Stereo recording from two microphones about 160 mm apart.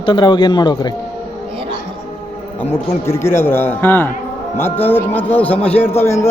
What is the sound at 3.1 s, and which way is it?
Speech, 15° left (ahead or behind).